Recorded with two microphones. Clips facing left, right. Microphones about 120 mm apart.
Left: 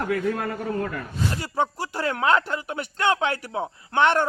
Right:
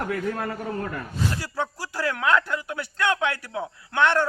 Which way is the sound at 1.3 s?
20° left (ahead or behind).